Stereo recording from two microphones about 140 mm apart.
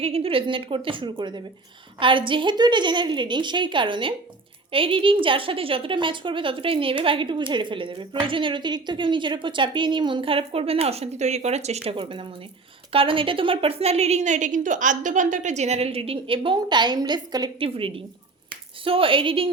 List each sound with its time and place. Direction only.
0.0 s a woman's voice: 45° right (ahead or behind)